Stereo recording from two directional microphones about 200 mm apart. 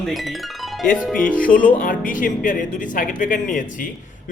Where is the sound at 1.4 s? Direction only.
45° left (ahead or behind).